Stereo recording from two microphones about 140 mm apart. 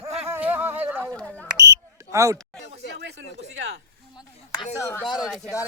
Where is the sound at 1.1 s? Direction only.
10° left (ahead or behind).